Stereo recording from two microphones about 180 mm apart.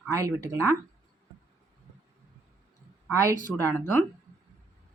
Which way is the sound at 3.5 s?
5° left (ahead or behind).